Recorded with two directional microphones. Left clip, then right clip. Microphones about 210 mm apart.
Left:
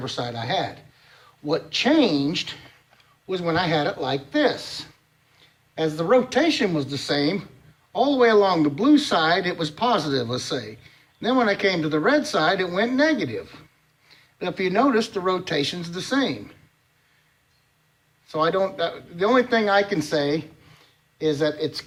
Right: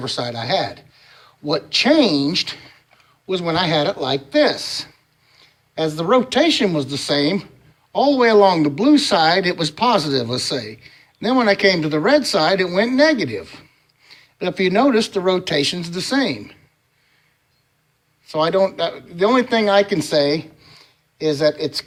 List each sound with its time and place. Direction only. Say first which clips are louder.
0.0 s speech: right 5 dB; 40° right (ahead or behind)
18.3 s speech: right 5 dB; 35° right (ahead or behind)